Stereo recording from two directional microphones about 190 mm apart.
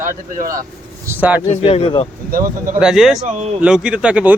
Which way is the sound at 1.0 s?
10° right (ahead or behind).